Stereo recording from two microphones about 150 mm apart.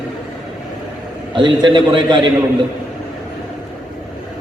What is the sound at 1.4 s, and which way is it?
Speech, 30° right (ahead or behind).